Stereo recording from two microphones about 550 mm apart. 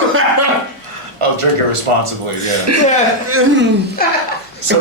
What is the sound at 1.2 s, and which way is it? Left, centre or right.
Speech, right.